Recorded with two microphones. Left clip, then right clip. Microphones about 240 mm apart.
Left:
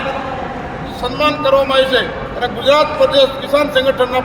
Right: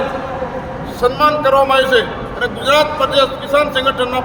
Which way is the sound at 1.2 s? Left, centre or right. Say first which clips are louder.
Even; centre.